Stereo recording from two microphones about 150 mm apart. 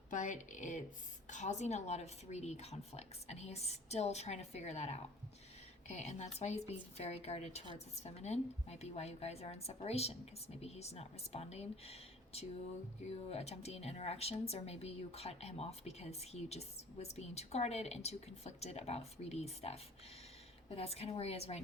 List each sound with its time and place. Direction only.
0.1 s speech: 55° left (ahead or behind)